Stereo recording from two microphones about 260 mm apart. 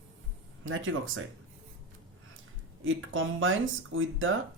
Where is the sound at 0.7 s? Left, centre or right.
Right.